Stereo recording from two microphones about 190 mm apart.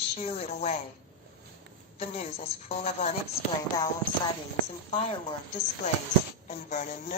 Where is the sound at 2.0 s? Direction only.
35° left (ahead or behind).